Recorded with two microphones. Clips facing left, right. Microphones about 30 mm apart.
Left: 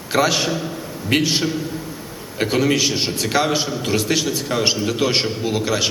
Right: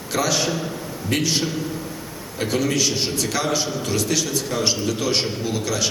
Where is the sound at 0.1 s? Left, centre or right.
Left.